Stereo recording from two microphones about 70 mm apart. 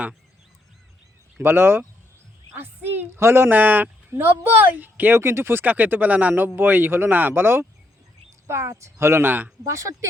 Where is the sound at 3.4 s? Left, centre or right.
Right.